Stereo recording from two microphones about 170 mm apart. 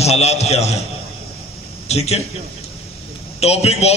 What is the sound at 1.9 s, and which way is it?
Speech, 40° left (ahead or behind).